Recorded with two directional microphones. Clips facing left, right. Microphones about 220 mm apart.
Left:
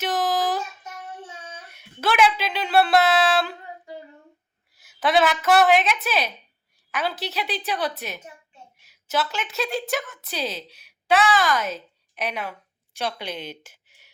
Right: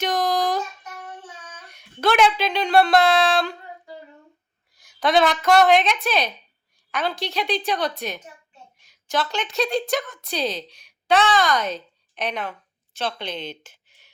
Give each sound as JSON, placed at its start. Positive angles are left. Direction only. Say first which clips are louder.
{"t": 0.0, "sound": "a sound", "louder": "right 2 dB", "side_deg": 5}
{"t": 1.4, "sound": "child singing", "louder": "left 3 dB", "side_deg": 25}
{"t": 1.6, "sound": "speech", "louder": "right 4 dB", "side_deg": 5}
{"t": 4.7, "sound": "a woman's voice", "louder": "right 1 dB", "side_deg": 5}